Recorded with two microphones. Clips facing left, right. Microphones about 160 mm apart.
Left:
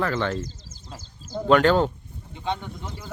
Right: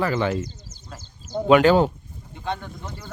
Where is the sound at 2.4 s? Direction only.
20° left (ahead or behind).